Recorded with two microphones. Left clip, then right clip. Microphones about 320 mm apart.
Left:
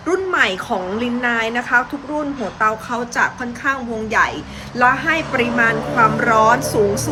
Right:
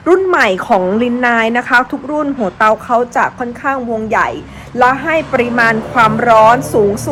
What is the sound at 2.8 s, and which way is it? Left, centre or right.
A woman's voice, centre.